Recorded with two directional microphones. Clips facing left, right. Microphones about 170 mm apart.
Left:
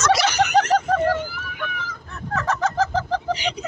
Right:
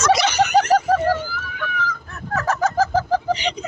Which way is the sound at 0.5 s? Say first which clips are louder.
Right 3 dB; 5° right (ahead or behind).